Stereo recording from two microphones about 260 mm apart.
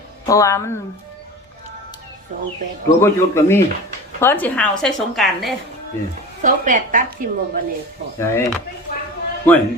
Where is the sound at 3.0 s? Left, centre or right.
Centre.